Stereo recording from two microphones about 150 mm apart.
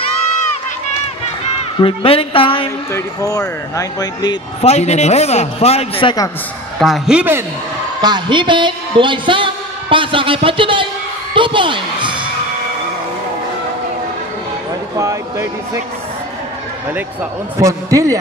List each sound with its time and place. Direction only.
1.8 s a woman's voice: 35° left (ahead or behind)
2.9 s speech: 25° left (ahead or behind)
4.6 s a man's voice: 45° left (ahead or behind)
6.8 s speech: 5° right (ahead or behind)
8.0 s a man's voice: 30° right (ahead or behind)
15.0 s speech: 20° right (ahead or behind)
17.6 s speech: 20° right (ahead or behind)